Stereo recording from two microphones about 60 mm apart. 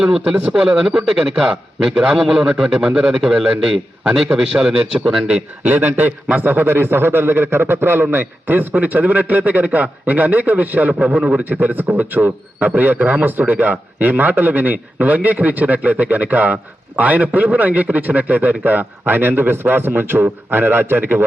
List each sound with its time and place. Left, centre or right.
0.0 s a man's voice: centre
5.2 s a man's voice: right